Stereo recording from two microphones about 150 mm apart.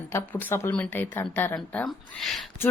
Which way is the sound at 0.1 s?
15° left (ahead or behind).